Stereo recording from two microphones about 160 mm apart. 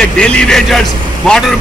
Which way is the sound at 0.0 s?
5° left (ahead or behind).